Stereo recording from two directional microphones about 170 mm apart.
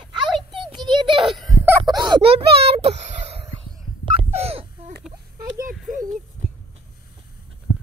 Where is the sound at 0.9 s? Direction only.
30° right (ahead or behind).